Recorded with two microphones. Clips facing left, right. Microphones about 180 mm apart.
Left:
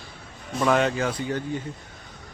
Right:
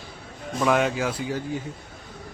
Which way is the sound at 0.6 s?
5° right (ahead or behind).